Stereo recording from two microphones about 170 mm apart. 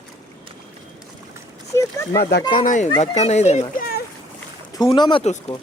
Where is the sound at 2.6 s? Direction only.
50° left (ahead or behind).